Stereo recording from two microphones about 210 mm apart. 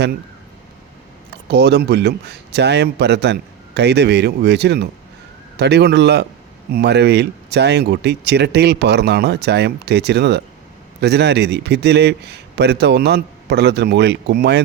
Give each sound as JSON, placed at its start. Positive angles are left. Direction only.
{"t": 1.5, "sound": "speech", "side_deg": -55}